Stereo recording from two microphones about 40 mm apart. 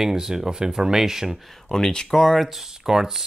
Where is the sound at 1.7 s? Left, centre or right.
Centre.